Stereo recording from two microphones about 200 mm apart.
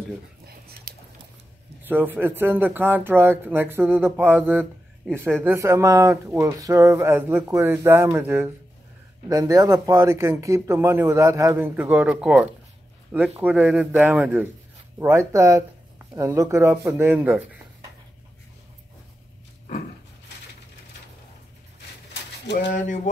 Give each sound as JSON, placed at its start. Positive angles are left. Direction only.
{"t": 0.5, "sound": "a sound", "side_deg": -50}
{"t": 1.9, "sound": "speech", "side_deg": -10}
{"t": 22.7, "sound": "speech", "side_deg": 40}